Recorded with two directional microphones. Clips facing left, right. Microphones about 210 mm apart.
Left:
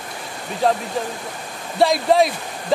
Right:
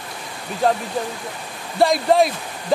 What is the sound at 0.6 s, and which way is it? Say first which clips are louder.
Speech: even; centre (ahead or behind).